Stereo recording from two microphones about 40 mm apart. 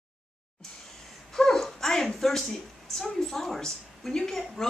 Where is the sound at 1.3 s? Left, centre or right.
Centre.